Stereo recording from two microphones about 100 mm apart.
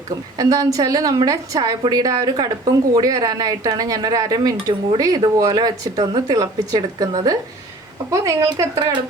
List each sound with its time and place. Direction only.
0.3 s speech: 40° right (ahead or behind)